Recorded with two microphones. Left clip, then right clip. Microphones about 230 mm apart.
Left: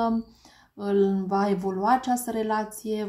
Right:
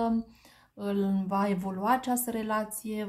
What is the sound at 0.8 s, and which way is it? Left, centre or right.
Speech, right.